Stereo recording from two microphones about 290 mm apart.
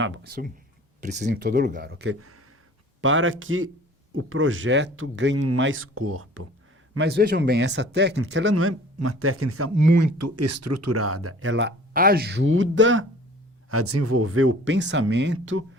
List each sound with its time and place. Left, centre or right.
0.0 s speech: right
6.9 s speech: right
9.7 s speech: right